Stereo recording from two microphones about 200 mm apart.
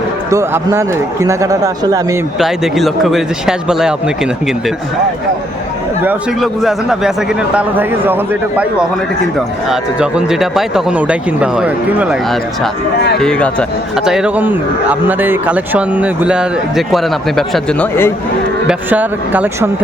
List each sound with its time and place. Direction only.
0.3 s a man's voice: 15° right (ahead or behind)
2.4 s speech: centre (ahead or behind)
6.0 s a man's voice: 5° right (ahead or behind)
18.7 s a man's voice: 10° right (ahead or behind)